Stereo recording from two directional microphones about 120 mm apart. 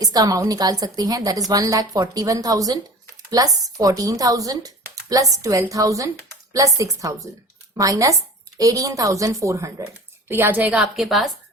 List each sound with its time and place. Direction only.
0.0 s a woman's voice: 30° right (ahead or behind); by 11.3 s centre (ahead or behind)